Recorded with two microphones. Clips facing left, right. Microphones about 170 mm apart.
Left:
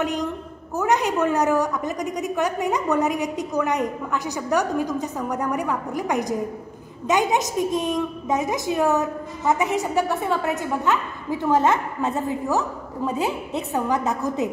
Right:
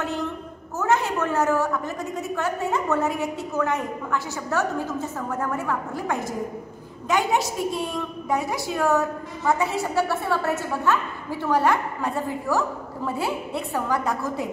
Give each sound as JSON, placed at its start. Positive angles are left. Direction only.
{"t": 0.0, "sound": "a woman's voice", "side_deg": 15}